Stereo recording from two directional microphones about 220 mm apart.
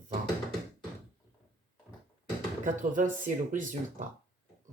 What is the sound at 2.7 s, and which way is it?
Speech, 35° right (ahead or behind).